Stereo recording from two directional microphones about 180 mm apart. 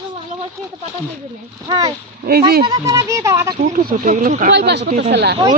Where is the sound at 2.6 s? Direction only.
20° right (ahead or behind).